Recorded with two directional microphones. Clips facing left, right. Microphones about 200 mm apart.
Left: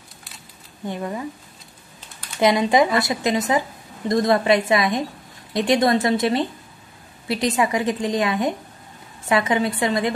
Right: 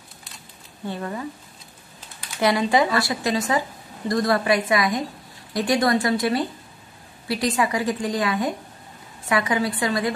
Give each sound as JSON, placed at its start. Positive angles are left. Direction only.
{"t": 0.8, "sound": "speech", "side_deg": 15}
{"t": 2.3, "sound": "a woman's voice", "side_deg": 20}